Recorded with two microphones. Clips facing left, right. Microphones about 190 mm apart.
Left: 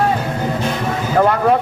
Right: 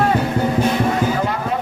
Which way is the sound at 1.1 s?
55° left (ahead or behind).